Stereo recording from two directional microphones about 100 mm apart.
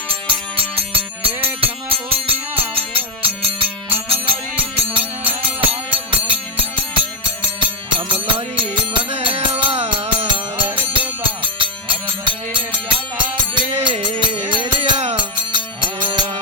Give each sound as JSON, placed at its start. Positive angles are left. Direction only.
{"t": 0.1, "sound": "music", "side_deg": -65}
{"t": 9.0, "sound": "music", "side_deg": -85}
{"t": 10.2, "sound": "music", "side_deg": -55}